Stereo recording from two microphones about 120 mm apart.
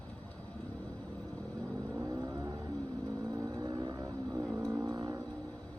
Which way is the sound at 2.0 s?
25° right (ahead or behind).